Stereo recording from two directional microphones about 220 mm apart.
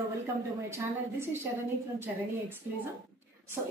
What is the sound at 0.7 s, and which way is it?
Speech, 10° right (ahead or behind).